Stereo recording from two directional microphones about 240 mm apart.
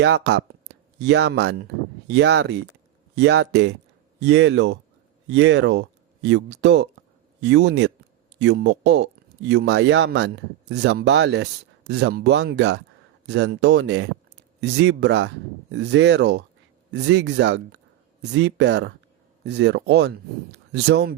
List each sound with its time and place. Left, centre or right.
0.0 s speech: right